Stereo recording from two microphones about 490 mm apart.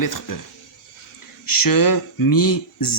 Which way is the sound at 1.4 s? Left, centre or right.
Left.